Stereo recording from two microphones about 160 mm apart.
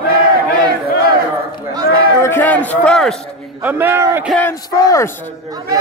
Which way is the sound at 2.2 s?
10° left (ahead or behind).